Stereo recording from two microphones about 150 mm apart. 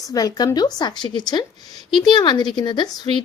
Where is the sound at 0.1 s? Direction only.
25° left (ahead or behind).